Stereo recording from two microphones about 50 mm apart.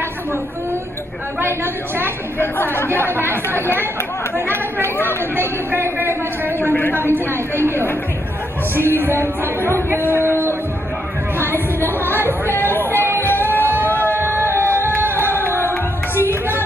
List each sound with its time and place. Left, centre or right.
2.3 s speech: left
3.0 s a man's voice: right
3.3 s speech: left
4.8 s speech: left
5.3 s a man's voice: right
6.6 s a woman's voice: left
8.7 s a man's voice: right
11.3 s speech: left
13.2 s music: left
14.3 s a sound: left
15.1 s music: left
16.3 s music: right